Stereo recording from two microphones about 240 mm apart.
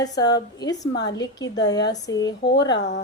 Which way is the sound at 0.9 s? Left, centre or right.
Left.